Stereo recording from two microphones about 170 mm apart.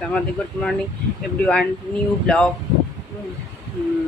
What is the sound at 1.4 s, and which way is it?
Speech, 5° left (ahead or behind).